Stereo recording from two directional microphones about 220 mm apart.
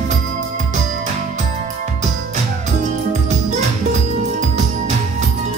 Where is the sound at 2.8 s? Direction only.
30° right (ahead or behind).